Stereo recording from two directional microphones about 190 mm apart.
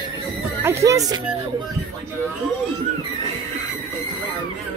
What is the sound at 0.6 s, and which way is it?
Speech, 15° right (ahead or behind).